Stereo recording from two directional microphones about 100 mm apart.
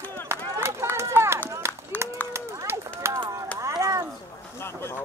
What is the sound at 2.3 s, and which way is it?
Run, 25° right (ahead or behind).